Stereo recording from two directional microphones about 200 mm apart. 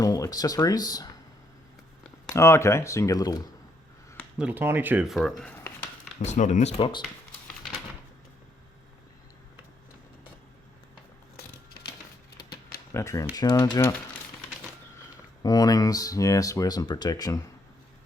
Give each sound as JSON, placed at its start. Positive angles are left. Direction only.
{"t": 0.0, "sound": "speech", "side_deg": 20}
{"t": 2.3, "sound": "speech", "side_deg": 15}
{"t": 4.4, "sound": "speech", "side_deg": -10}
{"t": 5.4, "sound": "a sound", "side_deg": 5}
{"t": 5.8, "sound": "speech", "side_deg": 40}
{"t": 12.9, "sound": "speech", "side_deg": 15}
{"t": 15.4, "sound": "speech", "side_deg": 20}